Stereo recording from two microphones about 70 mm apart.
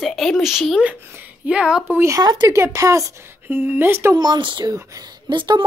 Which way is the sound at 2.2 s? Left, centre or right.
Right.